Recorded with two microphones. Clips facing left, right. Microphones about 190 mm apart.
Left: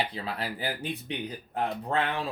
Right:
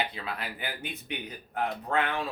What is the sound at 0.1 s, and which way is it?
Speech, 35° left (ahead or behind).